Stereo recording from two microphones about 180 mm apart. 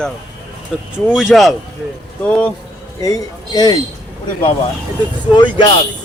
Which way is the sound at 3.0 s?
20° left (ahead or behind).